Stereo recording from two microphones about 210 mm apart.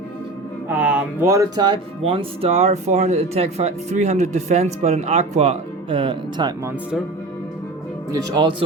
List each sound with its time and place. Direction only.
0.7 s speech: 5° right (ahead or behind); by 6.5 s 25° right (ahead or behind)
8.1 s speech: 20° right (ahead or behind)